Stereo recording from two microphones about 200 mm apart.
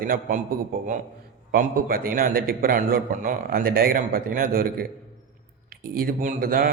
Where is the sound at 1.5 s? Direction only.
45° right (ahead or behind).